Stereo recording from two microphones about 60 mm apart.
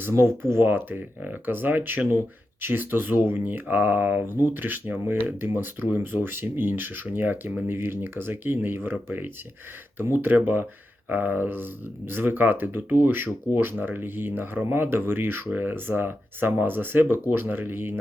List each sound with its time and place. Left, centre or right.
0.2 s speech: right